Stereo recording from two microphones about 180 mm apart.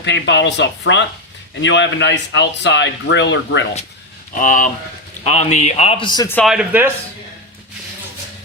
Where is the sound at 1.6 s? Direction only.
90° left.